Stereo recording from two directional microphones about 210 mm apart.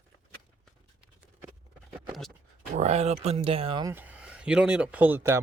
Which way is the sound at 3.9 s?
5° right (ahead or behind).